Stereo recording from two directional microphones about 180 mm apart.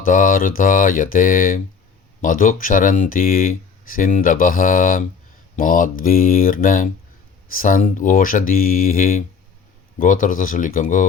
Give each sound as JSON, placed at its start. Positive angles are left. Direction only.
{"t": 0.0, "sound": "speech", "side_deg": 50}